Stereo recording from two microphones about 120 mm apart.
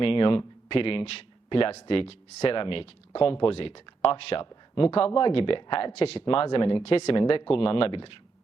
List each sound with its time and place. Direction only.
0.0 s speech: 50° left (ahead or behind)